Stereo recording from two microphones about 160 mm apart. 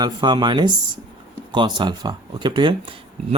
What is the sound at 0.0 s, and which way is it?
Speech, 30° right (ahead or behind).